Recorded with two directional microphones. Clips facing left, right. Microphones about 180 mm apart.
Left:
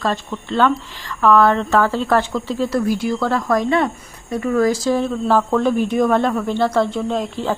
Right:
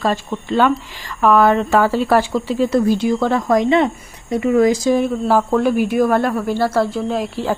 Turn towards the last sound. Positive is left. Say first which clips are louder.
# right 1 dB
turn(degrees=-10)  # may be behind; listen again after turning